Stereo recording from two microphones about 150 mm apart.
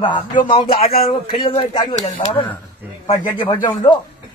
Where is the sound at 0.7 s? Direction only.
80° left.